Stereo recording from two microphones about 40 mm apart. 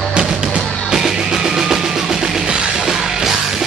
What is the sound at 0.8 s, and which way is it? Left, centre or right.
Music, centre.